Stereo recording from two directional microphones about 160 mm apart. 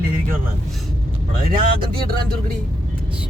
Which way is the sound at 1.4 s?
65° right (ahead or behind).